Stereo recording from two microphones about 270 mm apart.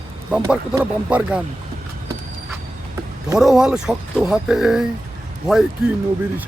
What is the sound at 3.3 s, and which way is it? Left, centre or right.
Speech, centre.